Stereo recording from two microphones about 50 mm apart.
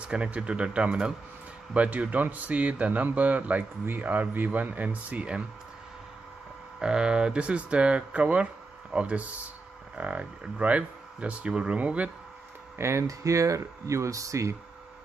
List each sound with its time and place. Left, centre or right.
0.0 s speech: right
6.8 s speech: centre
12.7 s speech: right